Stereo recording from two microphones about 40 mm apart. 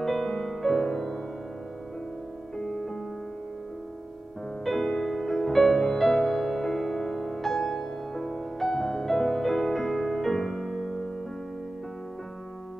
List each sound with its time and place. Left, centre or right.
0.0 s music: centre
2.5 s music: centre
4.6 s music: centre